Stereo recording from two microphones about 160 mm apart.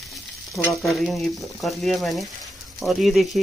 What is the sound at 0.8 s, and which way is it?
Speech, centre (ahead or behind).